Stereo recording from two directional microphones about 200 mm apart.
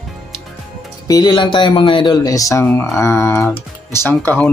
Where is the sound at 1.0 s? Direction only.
20° left (ahead or behind).